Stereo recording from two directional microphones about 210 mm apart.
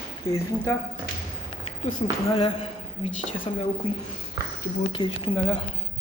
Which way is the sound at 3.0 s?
25° left (ahead or behind).